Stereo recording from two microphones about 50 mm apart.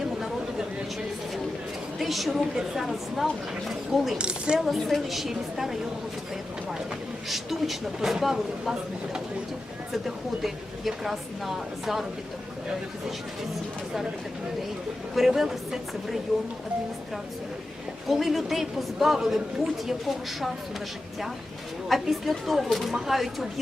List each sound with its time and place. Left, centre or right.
2.0 s a woman's voice: centre
4.2 s a woman's voice: centre
4.6 s a woman's voice: centre
7.3 s a woman's voice: centre
10.4 s a woman's voice: centre
15.1 s a woman's voice: centre
18.1 s a woman's voice: centre
21.8 s a woman's voice: centre